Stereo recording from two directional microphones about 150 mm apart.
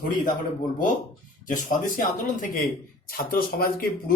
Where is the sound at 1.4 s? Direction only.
60° left (ahead or behind).